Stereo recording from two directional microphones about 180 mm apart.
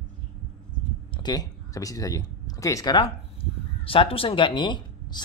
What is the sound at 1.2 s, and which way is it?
Speech, 20° left (ahead or behind).